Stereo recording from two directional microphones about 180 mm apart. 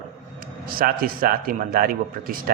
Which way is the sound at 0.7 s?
55° right (ahead or behind).